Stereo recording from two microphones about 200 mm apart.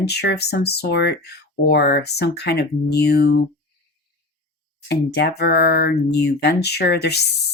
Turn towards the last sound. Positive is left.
turn(degrees=55)  # may be behind; listen again after turning